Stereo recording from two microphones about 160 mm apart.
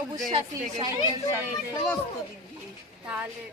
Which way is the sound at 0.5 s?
20° right (ahead or behind).